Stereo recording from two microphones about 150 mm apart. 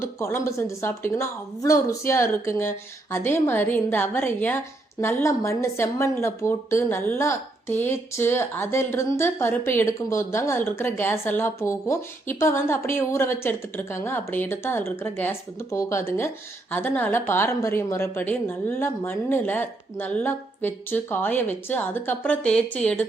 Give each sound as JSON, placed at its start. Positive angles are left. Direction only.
{"t": 0.2, "sound": "a woman's voice", "side_deg": 20}